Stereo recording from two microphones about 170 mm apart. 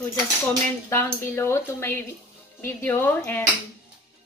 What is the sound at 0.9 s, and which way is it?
A woman's voice, 15° left (ahead or behind).